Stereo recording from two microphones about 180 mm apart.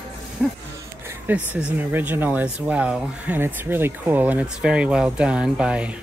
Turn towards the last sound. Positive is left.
turn(degrees=-5)  # may be behind; listen again after turning